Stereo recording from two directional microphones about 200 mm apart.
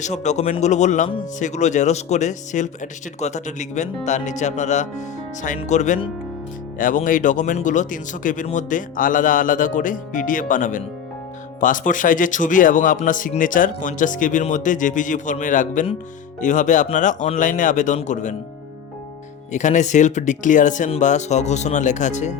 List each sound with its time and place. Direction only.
0.0 s a man's voice: 35° left (ahead or behind)
19.5 s a man's voice: 35° left (ahead or behind)